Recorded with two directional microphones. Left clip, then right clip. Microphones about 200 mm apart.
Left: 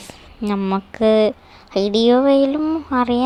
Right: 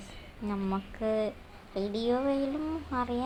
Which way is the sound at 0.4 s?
45° left (ahead or behind).